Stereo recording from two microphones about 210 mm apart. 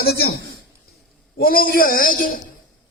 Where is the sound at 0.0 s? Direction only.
45° left (ahead or behind).